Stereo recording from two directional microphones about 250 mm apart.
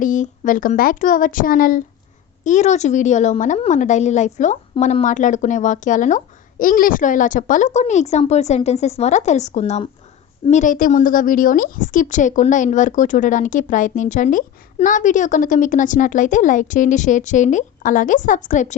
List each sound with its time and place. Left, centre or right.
0.0 s a woman's voice: left